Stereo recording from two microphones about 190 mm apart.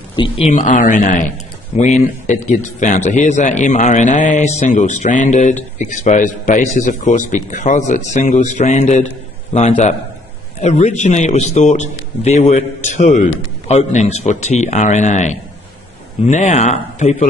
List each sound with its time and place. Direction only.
0.1 s speech: 25° left (ahead or behind)
0.5 s a man's voice: 40° left (ahead or behind)